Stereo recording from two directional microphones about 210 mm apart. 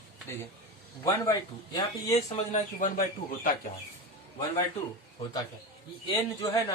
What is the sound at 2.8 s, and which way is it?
Speech, 40° left (ahead or behind).